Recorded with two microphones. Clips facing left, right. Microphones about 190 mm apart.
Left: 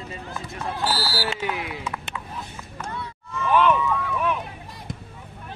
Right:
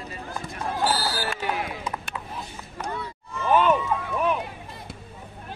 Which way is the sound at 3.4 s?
40° right (ahead or behind).